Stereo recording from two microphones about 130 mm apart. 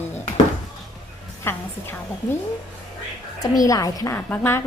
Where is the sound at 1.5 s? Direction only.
20° left (ahead or behind).